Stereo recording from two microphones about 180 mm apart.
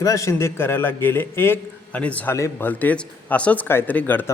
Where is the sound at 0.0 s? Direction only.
15° left (ahead or behind).